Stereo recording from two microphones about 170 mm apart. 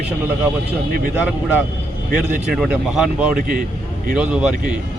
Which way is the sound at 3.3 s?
55° right (ahead or behind).